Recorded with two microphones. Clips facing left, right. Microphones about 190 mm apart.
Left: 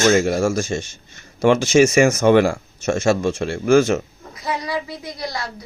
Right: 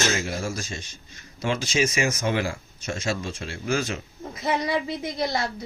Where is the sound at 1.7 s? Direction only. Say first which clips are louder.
Left 10 dB; 50° left (ahead or behind).